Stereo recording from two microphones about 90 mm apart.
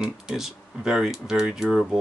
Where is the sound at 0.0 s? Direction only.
5° right (ahead or behind).